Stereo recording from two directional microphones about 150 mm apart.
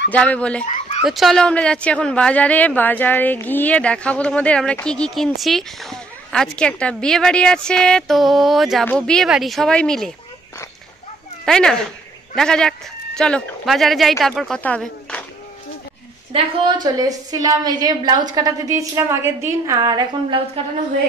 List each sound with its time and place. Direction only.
0.1 s a woman's voice: 10° left (ahead or behind)
11.4 s speech: 5° left (ahead or behind)
16.3 s a woman's voice: 30° right (ahead or behind)